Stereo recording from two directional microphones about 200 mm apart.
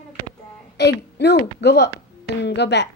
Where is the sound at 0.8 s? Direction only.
55° left (ahead or behind).